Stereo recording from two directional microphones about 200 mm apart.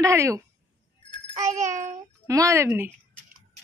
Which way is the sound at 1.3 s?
35° right (ahead or behind).